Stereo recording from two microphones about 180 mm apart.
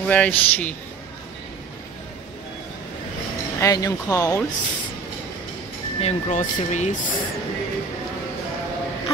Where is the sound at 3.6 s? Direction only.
20° left (ahead or behind).